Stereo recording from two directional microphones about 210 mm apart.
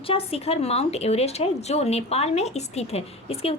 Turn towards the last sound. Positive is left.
turn(degrees=30)  # may be behind; listen again after turning